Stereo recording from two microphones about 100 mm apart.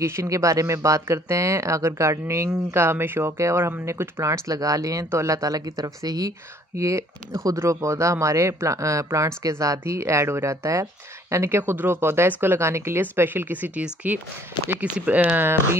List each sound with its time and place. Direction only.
0.0 s speech: 30° right (ahead or behind)